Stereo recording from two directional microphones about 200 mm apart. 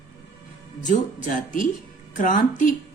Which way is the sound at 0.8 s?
40° left (ahead or behind).